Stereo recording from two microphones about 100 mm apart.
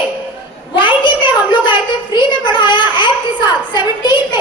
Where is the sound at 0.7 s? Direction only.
55° left (ahead or behind).